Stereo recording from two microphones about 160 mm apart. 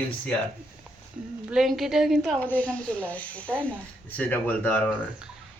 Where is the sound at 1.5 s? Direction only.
Centre (ahead or behind).